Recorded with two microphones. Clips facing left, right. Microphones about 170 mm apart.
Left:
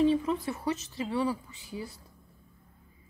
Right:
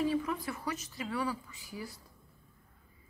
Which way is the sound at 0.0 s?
25° left (ahead or behind).